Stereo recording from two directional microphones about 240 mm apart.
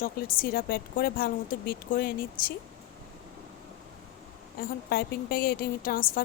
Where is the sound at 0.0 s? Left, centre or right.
Left.